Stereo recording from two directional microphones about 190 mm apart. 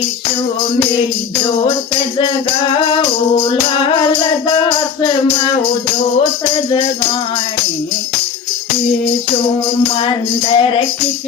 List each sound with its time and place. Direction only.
3.5 s music: 25° left (ahead or behind)
10.5 s music: 25° left (ahead or behind)